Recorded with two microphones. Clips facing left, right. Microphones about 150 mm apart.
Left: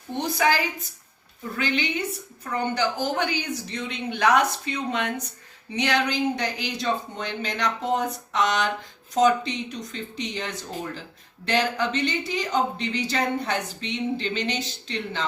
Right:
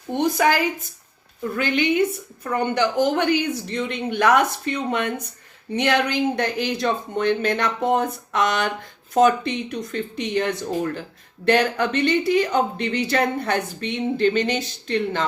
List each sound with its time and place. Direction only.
0.1 s speech: 55° right (ahead or behind)
1.5 s speech: 50° right (ahead or behind)